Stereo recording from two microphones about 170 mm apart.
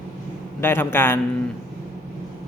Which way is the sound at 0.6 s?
15° left (ahead or behind).